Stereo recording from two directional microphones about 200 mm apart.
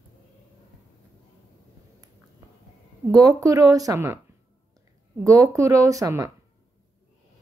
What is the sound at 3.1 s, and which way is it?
Speech, 15° right (ahead or behind).